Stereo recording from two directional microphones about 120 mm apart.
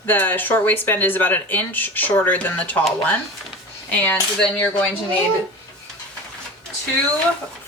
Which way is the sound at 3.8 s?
10° left (ahead or behind).